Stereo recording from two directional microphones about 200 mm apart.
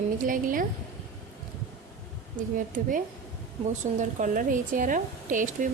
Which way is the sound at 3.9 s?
35° right (ahead or behind).